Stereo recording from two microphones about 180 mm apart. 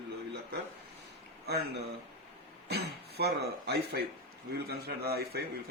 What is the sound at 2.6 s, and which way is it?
Speech, 65° right (ahead or behind).